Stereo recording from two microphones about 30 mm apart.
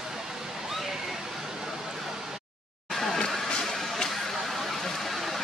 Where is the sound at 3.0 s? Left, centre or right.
Centre.